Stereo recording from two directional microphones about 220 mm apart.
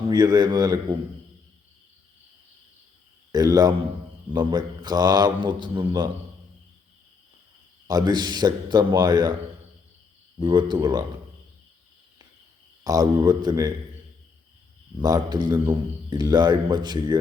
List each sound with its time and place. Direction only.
0.1 s a man's voice: 20° right (ahead or behind)
3.3 s a man's voice: 15° right (ahead or behind)
7.9 s a man's voice: 20° right (ahead or behind)
10.3 s a man's voice: 20° right (ahead or behind)
12.8 s a man's voice: 15° right (ahead or behind)
14.9 s a man's voice: 15° right (ahead or behind)